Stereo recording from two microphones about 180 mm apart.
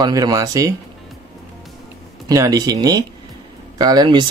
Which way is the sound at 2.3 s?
20° right (ahead or behind).